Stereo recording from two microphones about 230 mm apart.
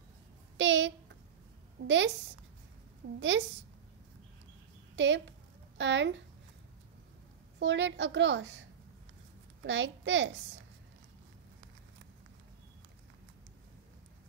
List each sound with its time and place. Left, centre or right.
0.6 s a sound: right
1.9 s a woman's voice: right
4.9 s a woman's voice: right
7.5 s a woman's voice: right
9.7 s a woman's voice: right